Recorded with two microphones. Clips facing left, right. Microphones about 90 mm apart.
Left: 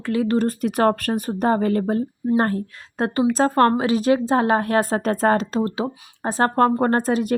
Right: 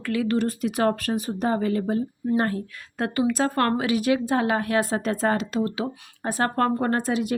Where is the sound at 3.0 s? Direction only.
30° left (ahead or behind).